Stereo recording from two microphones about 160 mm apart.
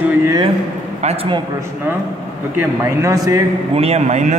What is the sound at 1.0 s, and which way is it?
Speech, 40° right (ahead or behind).